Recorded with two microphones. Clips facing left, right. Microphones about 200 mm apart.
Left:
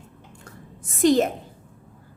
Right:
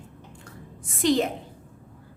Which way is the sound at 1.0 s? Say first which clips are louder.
Left 4 dB; 45° left (ahead or behind).